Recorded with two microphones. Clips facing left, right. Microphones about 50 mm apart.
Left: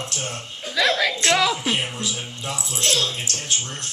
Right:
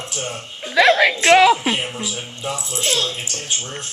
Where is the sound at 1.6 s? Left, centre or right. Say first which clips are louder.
Right 2 dB; centre.